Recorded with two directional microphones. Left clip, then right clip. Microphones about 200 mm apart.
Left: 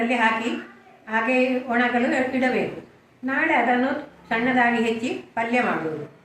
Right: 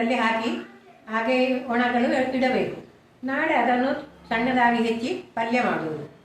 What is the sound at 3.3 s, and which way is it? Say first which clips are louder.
Speech: left 1 dB; 15° right (ahead or behind).